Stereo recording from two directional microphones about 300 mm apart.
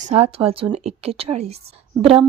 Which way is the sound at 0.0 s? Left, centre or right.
Right.